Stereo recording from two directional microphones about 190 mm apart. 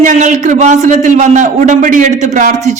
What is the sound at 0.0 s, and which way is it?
A man's voice, 40° right (ahead or behind).